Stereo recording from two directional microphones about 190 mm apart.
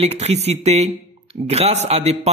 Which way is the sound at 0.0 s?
35° right (ahead or behind).